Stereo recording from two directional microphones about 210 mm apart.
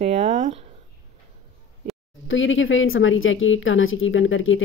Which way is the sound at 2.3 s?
65° left (ahead or behind).